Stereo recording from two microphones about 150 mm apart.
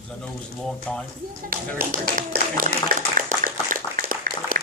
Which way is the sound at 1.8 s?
70° right (ahead or behind).